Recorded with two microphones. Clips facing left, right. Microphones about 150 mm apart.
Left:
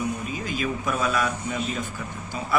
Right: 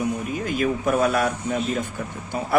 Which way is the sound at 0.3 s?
60° right (ahead or behind).